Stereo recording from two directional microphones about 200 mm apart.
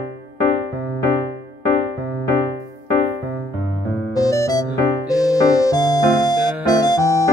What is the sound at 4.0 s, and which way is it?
Music, 15° left (ahead or behind).